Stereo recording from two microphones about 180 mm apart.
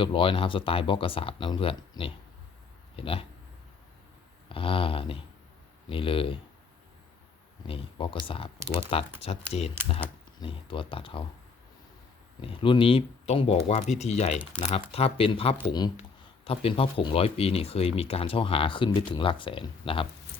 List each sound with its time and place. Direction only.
0.0 s speech: 30° left (ahead or behind)
4.4 s speech: 30° left (ahead or behind)
7.7 s speech: 30° left (ahead or behind)
12.4 s speech: 30° left (ahead or behind)